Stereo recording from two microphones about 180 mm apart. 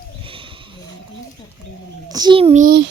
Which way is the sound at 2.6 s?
75° right (ahead or behind).